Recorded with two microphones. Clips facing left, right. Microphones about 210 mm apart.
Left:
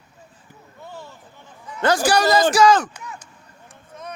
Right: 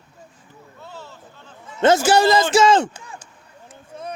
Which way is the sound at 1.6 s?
25° right (ahead or behind).